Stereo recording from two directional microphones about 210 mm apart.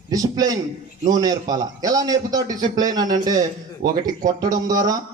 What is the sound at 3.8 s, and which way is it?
Speech, 45° right (ahead or behind).